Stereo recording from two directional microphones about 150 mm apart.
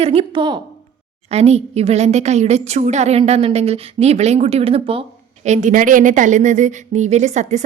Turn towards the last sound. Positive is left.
turn(degrees=-50)  # may be behind; listen again after turning